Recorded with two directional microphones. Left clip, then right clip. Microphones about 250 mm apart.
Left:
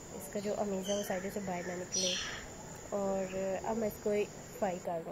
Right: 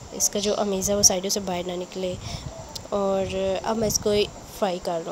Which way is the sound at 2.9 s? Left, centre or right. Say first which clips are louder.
Right 11 dB; right.